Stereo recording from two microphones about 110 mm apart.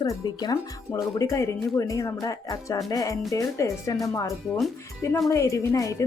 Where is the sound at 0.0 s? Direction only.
40° left (ahead or behind).